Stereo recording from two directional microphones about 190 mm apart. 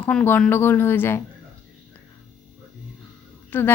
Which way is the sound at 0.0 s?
5° left (ahead or behind).